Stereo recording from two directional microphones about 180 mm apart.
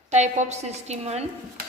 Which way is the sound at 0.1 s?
40° right (ahead or behind).